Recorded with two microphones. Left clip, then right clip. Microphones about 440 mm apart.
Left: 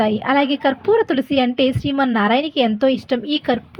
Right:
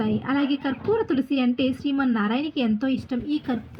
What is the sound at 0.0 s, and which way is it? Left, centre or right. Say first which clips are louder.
A woman's voice: left 9 dB; centre.